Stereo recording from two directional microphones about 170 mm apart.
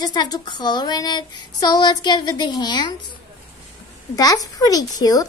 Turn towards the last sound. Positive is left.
turn(degrees=20)  # may be behind; listen again after turning